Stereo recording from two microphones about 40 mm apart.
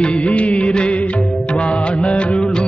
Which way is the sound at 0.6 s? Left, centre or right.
Left.